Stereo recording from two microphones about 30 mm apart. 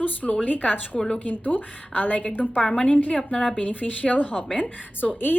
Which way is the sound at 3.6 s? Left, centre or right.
Left.